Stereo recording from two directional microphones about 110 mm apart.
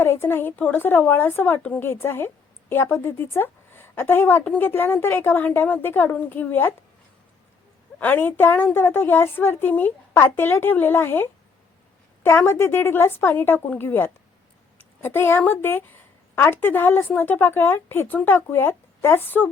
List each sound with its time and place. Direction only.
0.0 s a woman's voice: 20° left (ahead or behind)
7.9 s a woman's voice: 15° left (ahead or behind)